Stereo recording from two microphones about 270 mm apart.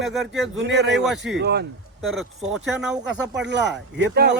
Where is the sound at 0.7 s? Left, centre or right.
Right.